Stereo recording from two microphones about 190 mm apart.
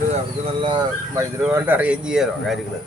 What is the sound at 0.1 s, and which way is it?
A man's voice, 30° right (ahead or behind).